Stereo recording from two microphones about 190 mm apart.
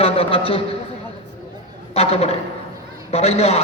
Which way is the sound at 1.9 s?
30° left (ahead or behind).